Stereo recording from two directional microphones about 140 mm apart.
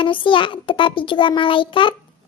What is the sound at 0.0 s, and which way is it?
A child's voice, 35° left (ahead or behind).